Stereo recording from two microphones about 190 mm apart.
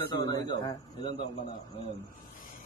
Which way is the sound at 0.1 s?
20° left (ahead or behind).